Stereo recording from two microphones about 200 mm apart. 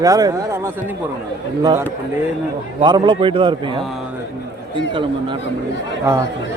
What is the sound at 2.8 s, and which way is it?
Speech, 20° right (ahead or behind).